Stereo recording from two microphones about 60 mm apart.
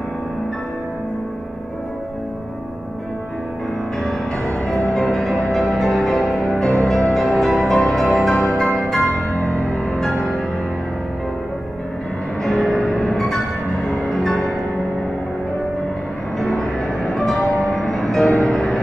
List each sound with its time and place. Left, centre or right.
4.6 s music: centre
12.4 s music: centre
16.3 s music: centre